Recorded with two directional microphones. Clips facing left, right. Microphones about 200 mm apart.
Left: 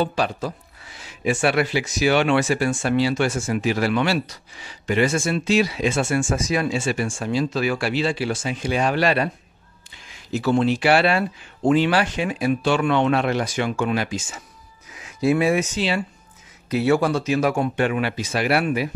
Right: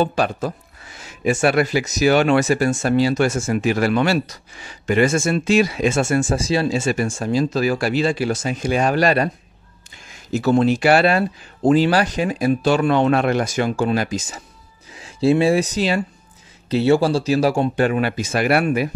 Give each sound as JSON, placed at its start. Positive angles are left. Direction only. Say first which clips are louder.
{"t": 0.0, "sound": "speech", "louder": "right 3 dB", "side_deg": -50}
{"t": 16.7, "sound": "speech", "louder": "right 3 dB", "side_deg": -30}